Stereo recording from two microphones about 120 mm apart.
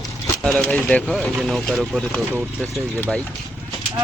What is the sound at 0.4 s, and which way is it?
Speech, 5° left (ahead or behind).